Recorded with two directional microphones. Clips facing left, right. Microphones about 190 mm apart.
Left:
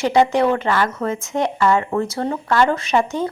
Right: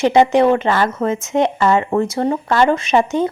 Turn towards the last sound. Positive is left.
turn(degrees=-20)  # may be behind; listen again after turning